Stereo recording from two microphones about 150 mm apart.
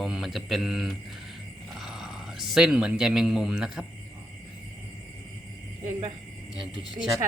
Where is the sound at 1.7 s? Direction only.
Centre (ahead or behind).